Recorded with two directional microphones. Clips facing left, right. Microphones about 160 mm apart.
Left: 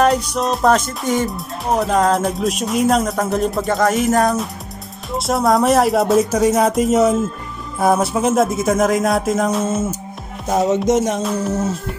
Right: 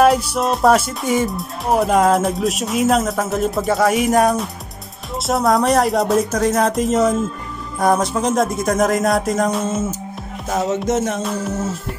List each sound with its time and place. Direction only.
0.0 s speech: 5° right (ahead or behind)
10.9 s music: 15° left (ahead or behind)